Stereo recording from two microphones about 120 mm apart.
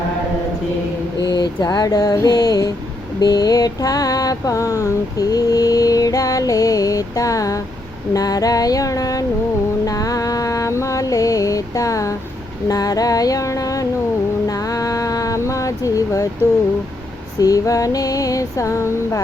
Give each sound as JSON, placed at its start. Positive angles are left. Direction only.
{"t": 1.2, "sound": "a sound", "side_deg": 35}
{"t": 3.2, "sound": "mantra", "side_deg": 35}
{"t": 9.8, "sound": "music", "side_deg": 30}
{"t": 12.6, "sound": "female singing", "side_deg": 30}
{"t": 14.4, "sound": "a sound", "side_deg": 30}
{"t": 17.4, "sound": "mantra", "side_deg": 30}